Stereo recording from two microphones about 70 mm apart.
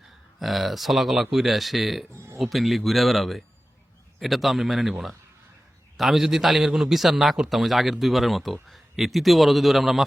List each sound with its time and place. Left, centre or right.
0.3 s a man's voice: centre
2.1 s a sound: right
2.4 s a man's voice: centre